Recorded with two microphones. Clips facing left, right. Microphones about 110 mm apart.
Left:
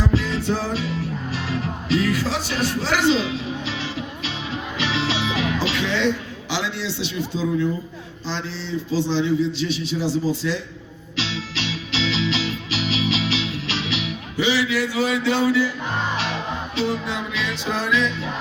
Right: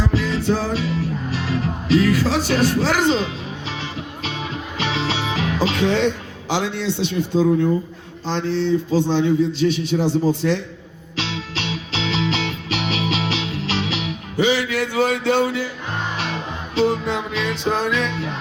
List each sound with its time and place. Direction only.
0.2 s music: 50° right (ahead or behind)
1.9 s a man's voice: 50° right (ahead or behind)
3.7 s music: 50° right (ahead or behind)
6.5 s a man's voice: 50° right (ahead or behind)
11.2 s music: 50° right (ahead or behind)